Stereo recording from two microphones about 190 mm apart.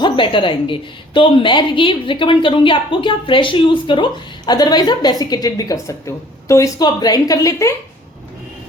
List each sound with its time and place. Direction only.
0.0 s a woman's voice: 25° left (ahead or behind)